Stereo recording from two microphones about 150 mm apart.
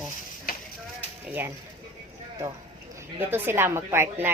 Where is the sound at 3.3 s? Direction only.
15° right (ahead or behind).